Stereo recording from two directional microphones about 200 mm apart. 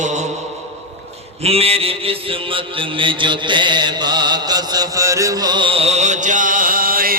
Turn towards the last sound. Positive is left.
turn(degrees=-45)  # may be behind; listen again after turning